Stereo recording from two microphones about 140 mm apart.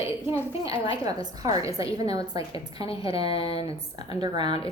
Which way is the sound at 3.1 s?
45° left (ahead or behind).